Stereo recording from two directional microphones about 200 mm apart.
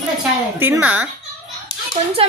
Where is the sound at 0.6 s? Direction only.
10° right (ahead or behind).